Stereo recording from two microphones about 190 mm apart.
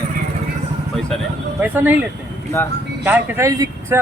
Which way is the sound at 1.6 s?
10° right (ahead or behind).